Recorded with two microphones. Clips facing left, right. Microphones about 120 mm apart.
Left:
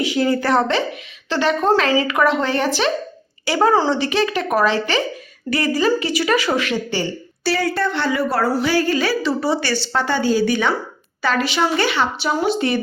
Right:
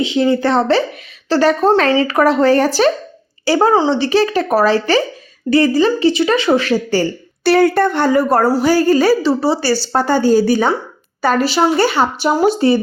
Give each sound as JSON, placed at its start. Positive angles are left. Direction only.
{"t": 0.0, "sound": "speech", "side_deg": -25}
{"t": 1.3, "sound": "a woman's voice", "side_deg": -40}
{"t": 3.7, "sound": "speech", "side_deg": -25}
{"t": 7.4, "sound": "speech", "side_deg": -60}